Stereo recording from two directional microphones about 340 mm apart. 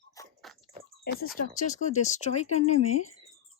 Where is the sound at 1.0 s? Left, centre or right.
Left.